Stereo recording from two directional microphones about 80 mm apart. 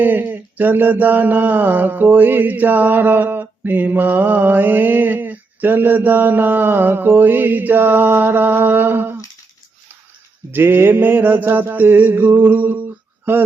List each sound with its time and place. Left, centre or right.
0.0 s mantra: right
10.5 s mantra: right